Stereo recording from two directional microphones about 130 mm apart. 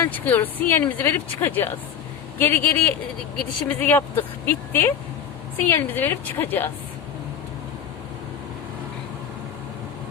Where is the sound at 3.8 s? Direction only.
15° left (ahead or behind).